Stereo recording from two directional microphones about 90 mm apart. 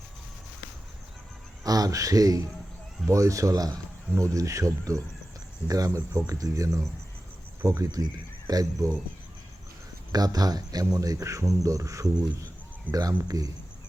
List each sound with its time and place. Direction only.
1.6 s speech: 45° right (ahead or behind)
10.1 s speech: 45° right (ahead or behind)